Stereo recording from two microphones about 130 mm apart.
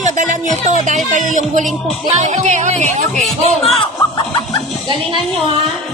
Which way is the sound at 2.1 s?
65° right (ahead or behind).